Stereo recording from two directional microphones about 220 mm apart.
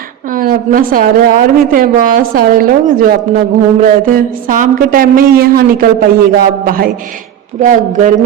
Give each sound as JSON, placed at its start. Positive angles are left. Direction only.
{"t": 0.3, "sound": "speech", "side_deg": -40}